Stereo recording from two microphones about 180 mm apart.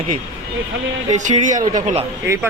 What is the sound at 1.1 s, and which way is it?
Speech, 45° right (ahead or behind).